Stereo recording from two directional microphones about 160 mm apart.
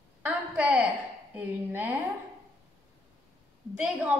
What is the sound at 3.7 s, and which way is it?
Speech, 5° right (ahead or behind).